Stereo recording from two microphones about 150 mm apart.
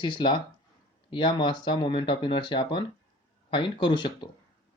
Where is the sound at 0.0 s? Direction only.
30° left (ahead or behind).